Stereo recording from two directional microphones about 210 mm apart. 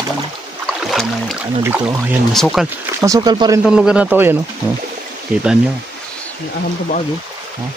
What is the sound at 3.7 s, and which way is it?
Speech, 5° right (ahead or behind).